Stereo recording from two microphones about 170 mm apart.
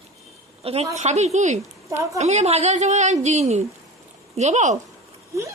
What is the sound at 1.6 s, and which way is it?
Speech, 20° right (ahead or behind).